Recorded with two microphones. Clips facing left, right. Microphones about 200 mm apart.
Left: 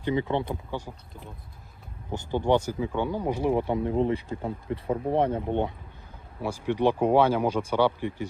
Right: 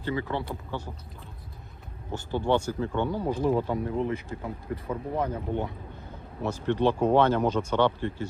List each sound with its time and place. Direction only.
0.0 s speech: 20° left (ahead or behind)
6.4 s speech: 10° left (ahead or behind)